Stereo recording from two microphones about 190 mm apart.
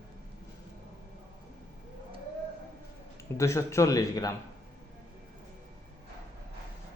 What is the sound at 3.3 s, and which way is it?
Speech, 15° left (ahead or behind).